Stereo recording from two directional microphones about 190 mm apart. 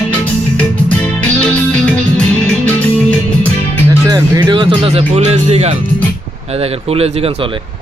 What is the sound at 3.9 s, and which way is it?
Speech, 20° right (ahead or behind).